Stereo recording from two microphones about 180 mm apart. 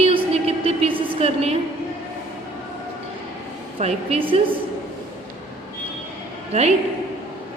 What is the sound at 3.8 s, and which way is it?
Speech, 35° right (ahead or behind).